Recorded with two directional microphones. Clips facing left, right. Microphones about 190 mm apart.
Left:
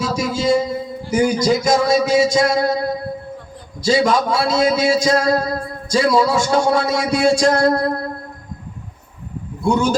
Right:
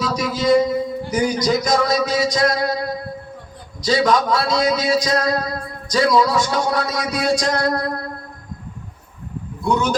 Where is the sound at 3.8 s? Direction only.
25° left (ahead or behind).